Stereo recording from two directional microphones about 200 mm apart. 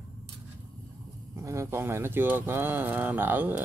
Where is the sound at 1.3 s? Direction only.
15° right (ahead or behind).